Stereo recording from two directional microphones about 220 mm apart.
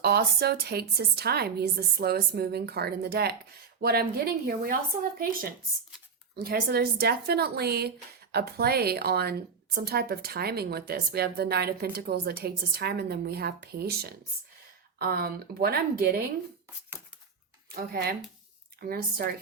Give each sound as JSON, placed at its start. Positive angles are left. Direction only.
{"t": 0.0, "sound": "a woman's voice", "side_deg": -45}
{"t": 18.8, "sound": "a woman's voice", "side_deg": -45}